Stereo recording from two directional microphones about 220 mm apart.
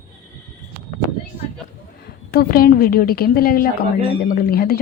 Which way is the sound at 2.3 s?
45° left (ahead or behind).